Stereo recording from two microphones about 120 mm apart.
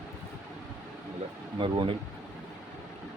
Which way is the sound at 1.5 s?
45° right (ahead or behind).